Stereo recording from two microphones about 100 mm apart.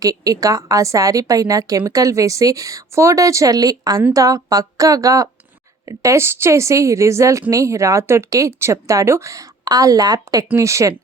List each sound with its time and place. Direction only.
0.0 s a woman's voice: 35° right (ahead or behind)